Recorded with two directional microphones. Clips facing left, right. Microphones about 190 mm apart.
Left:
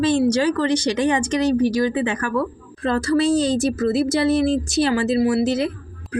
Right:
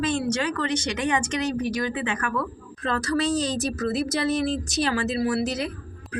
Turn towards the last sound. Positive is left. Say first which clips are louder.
# left 6 dB
turn(degrees=25)  # may be behind; listen again after turning